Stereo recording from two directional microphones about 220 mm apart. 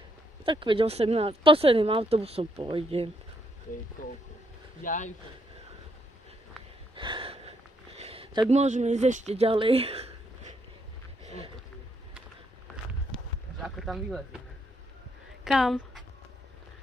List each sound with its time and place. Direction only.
0.5 s speech: 25° right (ahead or behind)
4.0 s speech: 40° left (ahead or behind)
7.0 s gasp: 25° right (ahead or behind)
11.2 s roaring cats: 25° right (ahead or behind)
13.6 s speech: centre (ahead or behind)
15.4 s speech: centre (ahead or behind)